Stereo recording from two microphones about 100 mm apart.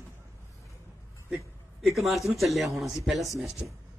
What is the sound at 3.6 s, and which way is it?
Speech, 15° right (ahead or behind).